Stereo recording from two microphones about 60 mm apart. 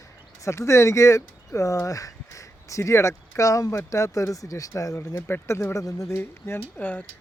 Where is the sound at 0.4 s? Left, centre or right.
Left.